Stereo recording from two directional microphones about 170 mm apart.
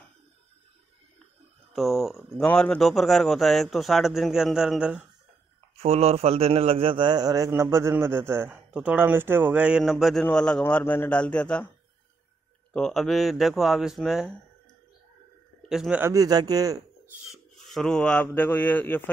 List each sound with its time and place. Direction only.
1.7 s speech: centre (ahead or behind)
5.8 s a man's voice: 35° right (ahead or behind); by 11.7 s 5° left (ahead or behind)
12.7 s speech: centre (ahead or behind)
15.7 s speech: centre (ahead or behind)
16.0 s a man's voice: 20° right (ahead or behind)
17.2 s speech: centre (ahead or behind)